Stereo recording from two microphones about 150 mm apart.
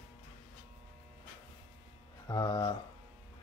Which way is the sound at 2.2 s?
25° left (ahead or behind).